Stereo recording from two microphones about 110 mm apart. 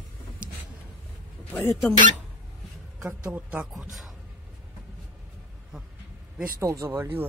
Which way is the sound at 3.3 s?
15° right (ahead or behind).